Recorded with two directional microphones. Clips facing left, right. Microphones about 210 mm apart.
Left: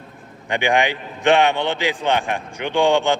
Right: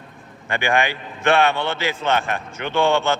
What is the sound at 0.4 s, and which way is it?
A man's voice, 15° left (ahead or behind).